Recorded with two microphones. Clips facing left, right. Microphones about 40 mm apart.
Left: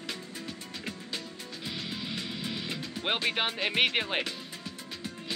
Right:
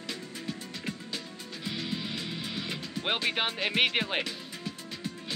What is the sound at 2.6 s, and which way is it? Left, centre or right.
Speech, centre.